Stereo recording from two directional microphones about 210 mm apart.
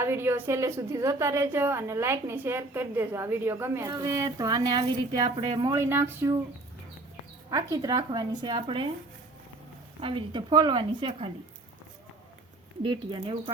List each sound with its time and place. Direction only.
0.0 s a woman's voice: 10° right (ahead or behind)
7.5 s speech: 15° right (ahead or behind)
10.0 s speech: 25° right (ahead or behind)
12.8 s speech: 25° right (ahead or behind)